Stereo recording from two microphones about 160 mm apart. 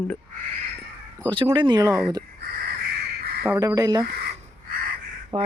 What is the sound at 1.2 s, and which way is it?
Speech, 30° right (ahead or behind).